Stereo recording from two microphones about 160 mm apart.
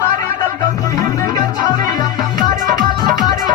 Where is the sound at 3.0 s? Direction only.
25° left (ahead or behind).